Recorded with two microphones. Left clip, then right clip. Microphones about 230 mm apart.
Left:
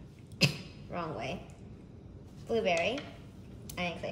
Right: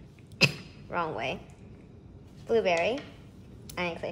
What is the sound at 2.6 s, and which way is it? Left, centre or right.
Speech, centre.